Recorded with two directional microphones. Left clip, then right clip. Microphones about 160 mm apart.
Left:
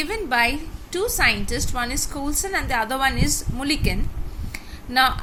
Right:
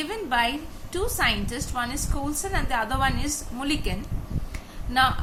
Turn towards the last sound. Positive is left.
turn(degrees=30)  # may be behind; listen again after turning